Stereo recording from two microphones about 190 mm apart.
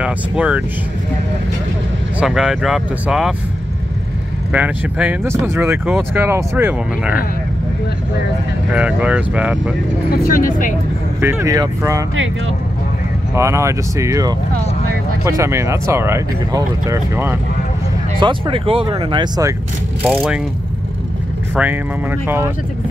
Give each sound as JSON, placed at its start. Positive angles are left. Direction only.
{"t": 0.0, "sound": "speech", "side_deg": -5}
{"t": 2.1, "sound": "speech", "side_deg": -5}
{"t": 4.5, "sound": "speech", "side_deg": -5}
{"t": 8.7, "sound": "speech", "side_deg": -5}
{"t": 10.1, "sound": "speech", "side_deg": 50}
{"t": 11.1, "sound": "speech", "side_deg": -15}
{"t": 13.3, "sound": "speech", "side_deg": -15}
{"t": 18.2, "sound": "speech", "side_deg": -25}
{"t": 20.0, "sound": "speech", "side_deg": -5}